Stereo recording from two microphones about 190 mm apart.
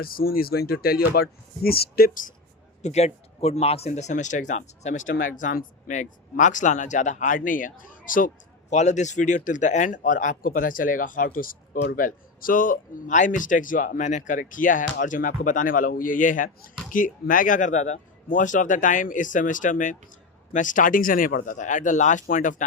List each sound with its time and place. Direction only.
0.0 s speech: 50° left (ahead or behind)
2.8 s speech: 35° left (ahead or behind)